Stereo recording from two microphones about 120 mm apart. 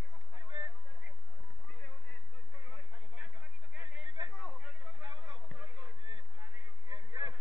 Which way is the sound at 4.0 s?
40° right (ahead or behind).